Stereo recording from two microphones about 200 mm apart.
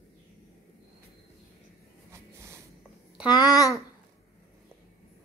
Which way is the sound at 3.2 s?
20° left (ahead or behind).